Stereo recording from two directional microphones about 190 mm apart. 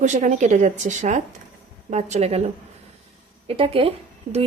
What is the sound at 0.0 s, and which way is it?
A woman's voice, 40° right (ahead or behind).